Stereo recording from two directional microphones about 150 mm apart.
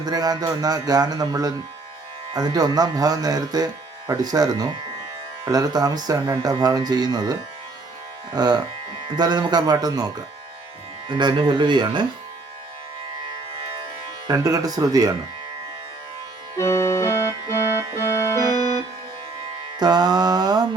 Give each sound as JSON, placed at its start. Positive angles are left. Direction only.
{"t": 0.0, "sound": "speech", "side_deg": -25}
{"t": 8.4, "sound": "speech", "side_deg": -25}
{"t": 11.1, "sound": "speech", "side_deg": -30}
{"t": 14.3, "sound": "speech", "side_deg": -25}
{"t": 16.6, "sound": "music", "side_deg": 20}
{"t": 19.8, "sound": "music", "side_deg": -30}